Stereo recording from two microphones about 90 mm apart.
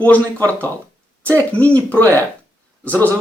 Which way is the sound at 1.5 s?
15° left (ahead or behind).